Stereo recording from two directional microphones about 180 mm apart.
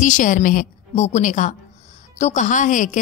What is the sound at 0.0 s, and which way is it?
A woman's voice, 45° left (ahead or behind).